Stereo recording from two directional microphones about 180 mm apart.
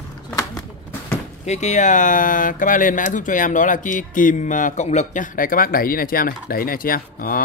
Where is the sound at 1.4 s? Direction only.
40° left (ahead or behind).